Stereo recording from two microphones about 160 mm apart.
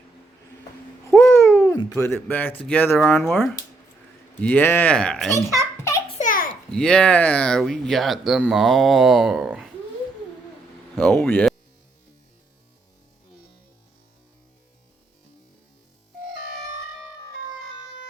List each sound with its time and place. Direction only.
1.1 s babbling: 5° left (ahead or behind)
1.4 s a sound: 15° left (ahead or behind)
1.9 s speech: 15° left (ahead or behind)
3.2 s speech: centre (ahead or behind)
5.3 s a child's voice: 20° right (ahead or behind)
6.1 s a sound: 55° left (ahead or behind)
6.7 s speech: 5° left (ahead or behind)
10.9 s speech: 10° left (ahead or behind)